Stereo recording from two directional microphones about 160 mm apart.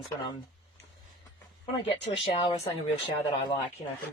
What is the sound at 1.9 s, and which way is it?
Speech, 35° left (ahead or behind).